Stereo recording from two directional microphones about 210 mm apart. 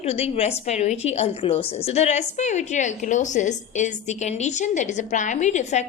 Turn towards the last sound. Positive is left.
turn(degrees=35)  # may be behind; listen again after turning